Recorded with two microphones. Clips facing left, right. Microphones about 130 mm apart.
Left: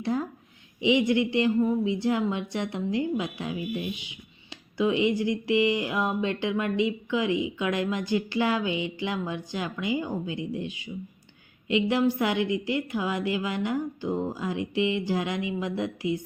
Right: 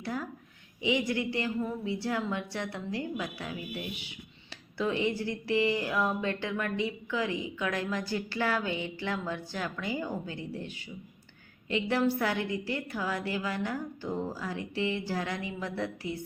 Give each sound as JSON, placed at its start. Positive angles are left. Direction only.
{"t": 0.0, "sound": "a woman's voice", "side_deg": 25}